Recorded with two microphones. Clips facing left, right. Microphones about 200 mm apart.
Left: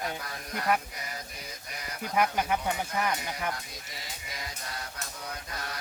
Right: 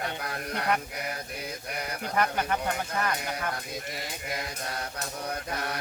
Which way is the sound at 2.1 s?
10° left (ahead or behind).